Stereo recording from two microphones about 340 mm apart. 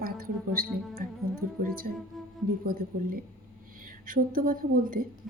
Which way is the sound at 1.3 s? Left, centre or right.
Right.